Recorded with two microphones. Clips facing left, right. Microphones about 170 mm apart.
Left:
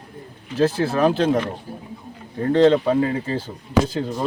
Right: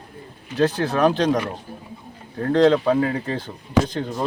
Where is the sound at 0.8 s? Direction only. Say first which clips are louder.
Even; 5° left (ahead or behind).